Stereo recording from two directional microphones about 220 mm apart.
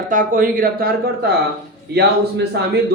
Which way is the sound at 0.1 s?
40° right (ahead or behind).